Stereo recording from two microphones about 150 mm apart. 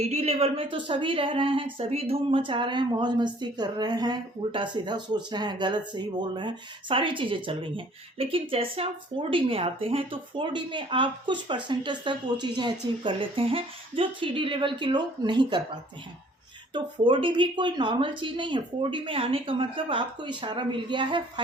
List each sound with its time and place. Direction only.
0.1 s speech: 45° right (ahead or behind)
16.7 s speech: 35° right (ahead or behind)